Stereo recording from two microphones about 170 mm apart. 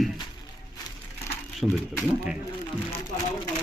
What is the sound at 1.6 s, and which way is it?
Speech, 10° left (ahead or behind).